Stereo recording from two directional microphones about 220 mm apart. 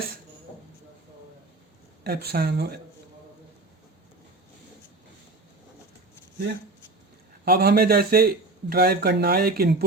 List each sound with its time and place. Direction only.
2.0 s a man's voice: 45° right (ahead or behind)
7.4 s a man's voice: 45° right (ahead or behind)